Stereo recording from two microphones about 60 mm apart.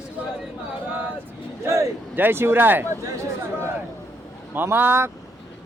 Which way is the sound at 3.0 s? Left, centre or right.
Right.